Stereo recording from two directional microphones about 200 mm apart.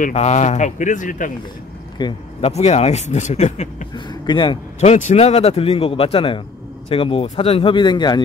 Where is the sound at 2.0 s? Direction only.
20° left (ahead or behind).